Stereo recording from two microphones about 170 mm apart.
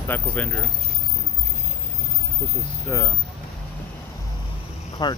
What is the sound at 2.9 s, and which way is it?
Speech, 25° left (ahead or behind).